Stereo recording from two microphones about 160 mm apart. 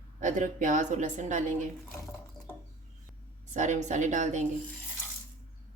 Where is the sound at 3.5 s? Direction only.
50° right (ahead or behind).